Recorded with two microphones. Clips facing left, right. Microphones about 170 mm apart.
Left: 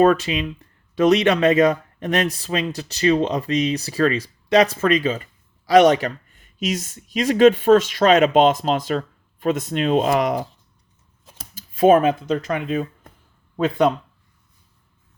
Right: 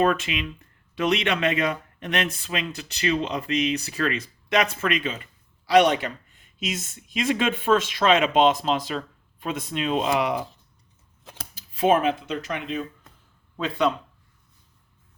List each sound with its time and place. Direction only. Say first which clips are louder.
0.0 s speech: left 6 dB; 40° left (ahead or behind)
11.5 s speech: left 6 dB; 50° left (ahead or behind)